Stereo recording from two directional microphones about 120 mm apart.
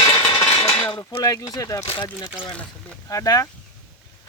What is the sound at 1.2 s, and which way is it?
Speech, 30° left (ahead or behind).